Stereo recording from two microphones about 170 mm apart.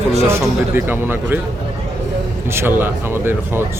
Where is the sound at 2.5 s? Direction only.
15° right (ahead or behind).